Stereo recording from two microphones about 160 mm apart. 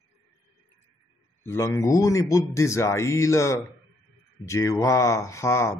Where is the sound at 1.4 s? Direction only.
15° left (ahead or behind).